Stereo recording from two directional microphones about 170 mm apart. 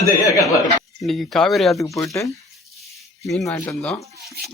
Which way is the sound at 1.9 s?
20° left (ahead or behind).